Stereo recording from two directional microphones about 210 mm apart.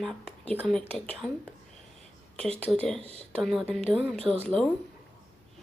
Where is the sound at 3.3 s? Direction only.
Centre (ahead or behind).